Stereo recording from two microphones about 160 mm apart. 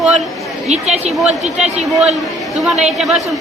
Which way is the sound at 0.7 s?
45° right (ahead or behind).